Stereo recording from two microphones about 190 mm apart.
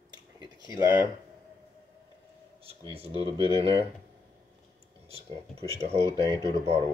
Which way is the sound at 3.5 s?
30° right (ahead or behind).